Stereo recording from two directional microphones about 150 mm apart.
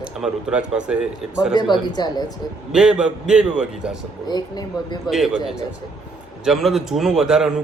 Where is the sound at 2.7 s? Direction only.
5° right (ahead or behind).